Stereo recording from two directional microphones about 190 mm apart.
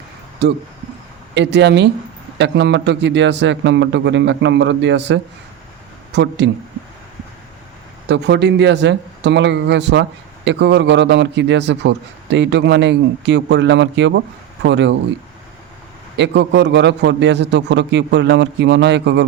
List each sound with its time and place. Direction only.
0.4 s speech: 65° right (ahead or behind)
8.0 s speech: 65° right (ahead or behind)
16.1 s a man's voice: 65° right (ahead or behind)